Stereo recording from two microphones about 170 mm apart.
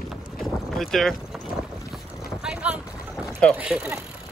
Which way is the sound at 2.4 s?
5° right (ahead or behind).